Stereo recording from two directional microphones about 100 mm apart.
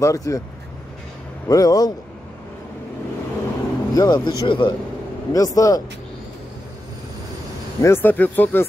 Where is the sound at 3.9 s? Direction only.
40° left (ahead or behind).